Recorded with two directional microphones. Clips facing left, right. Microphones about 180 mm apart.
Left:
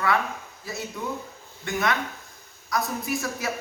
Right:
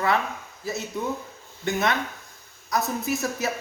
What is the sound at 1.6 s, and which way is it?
A man's voice, 25° right (ahead or behind).